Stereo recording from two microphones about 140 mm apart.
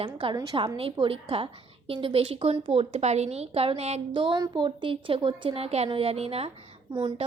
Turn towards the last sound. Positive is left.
turn(degrees=-25)  # may be behind; listen again after turning